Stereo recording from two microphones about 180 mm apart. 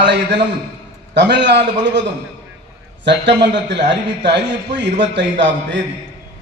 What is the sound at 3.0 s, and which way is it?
A man's voice, 75° right (ahead or behind).